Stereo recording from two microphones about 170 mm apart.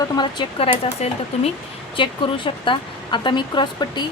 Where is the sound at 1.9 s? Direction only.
30° left (ahead or behind).